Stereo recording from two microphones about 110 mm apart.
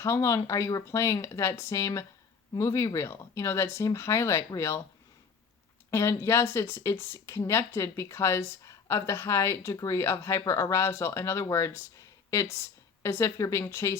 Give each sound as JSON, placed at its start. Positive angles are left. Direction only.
{"t": 0.0, "sound": "speech", "side_deg": 30}
{"t": 5.9, "sound": "a woman's voice", "side_deg": 25}